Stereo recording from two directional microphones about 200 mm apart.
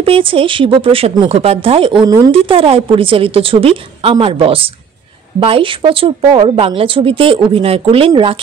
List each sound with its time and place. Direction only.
0.0 s a woman's voice: 25° right (ahead or behind)